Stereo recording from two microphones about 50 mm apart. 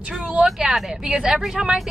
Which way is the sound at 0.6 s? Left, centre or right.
Centre.